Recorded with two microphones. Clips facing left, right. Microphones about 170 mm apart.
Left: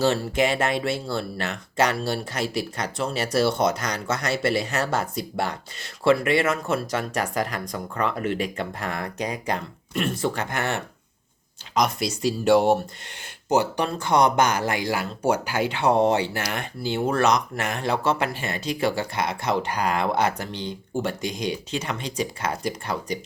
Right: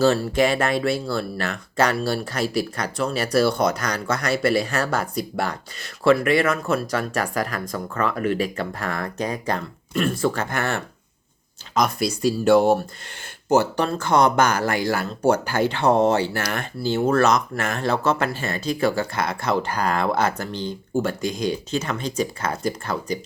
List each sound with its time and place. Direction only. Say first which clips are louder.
0.0 s speech: right 3 dB; 20° left (ahead or behind)